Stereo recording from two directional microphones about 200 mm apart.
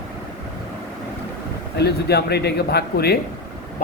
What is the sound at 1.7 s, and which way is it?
Speech, 55° left (ahead or behind).